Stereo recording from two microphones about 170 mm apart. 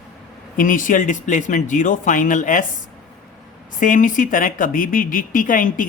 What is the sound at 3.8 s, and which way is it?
Speech, 50° left (ahead or behind).